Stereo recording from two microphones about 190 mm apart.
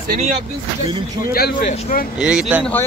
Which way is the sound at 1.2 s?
50° left (ahead or behind).